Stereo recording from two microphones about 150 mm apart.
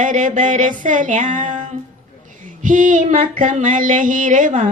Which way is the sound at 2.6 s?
60° right (ahead or behind).